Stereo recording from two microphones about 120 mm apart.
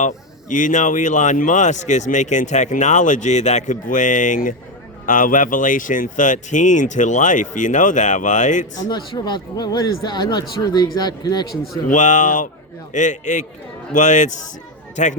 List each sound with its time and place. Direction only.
0.0 s speech: 90° left
8.9 s speech: 40° left (ahead or behind)
11.9 s speech: 90° left